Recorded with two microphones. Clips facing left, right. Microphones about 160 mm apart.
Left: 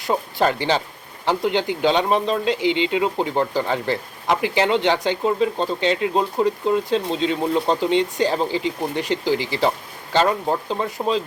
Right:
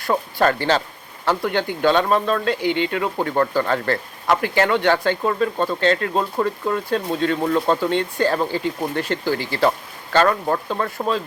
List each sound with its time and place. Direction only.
0.0 s speech: 20° left (ahead or behind)